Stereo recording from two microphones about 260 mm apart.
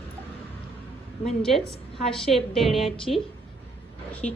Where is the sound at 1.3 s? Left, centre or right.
Centre.